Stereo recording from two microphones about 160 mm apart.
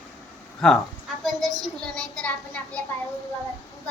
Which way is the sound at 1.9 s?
5° left (ahead or behind).